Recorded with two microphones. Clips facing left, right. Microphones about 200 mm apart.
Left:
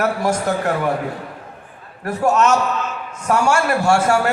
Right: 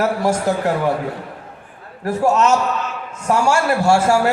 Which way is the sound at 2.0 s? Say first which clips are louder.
Right 1 dB; 25° right (ahead or behind).